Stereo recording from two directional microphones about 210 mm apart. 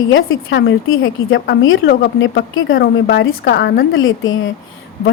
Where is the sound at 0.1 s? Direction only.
65° left (ahead or behind).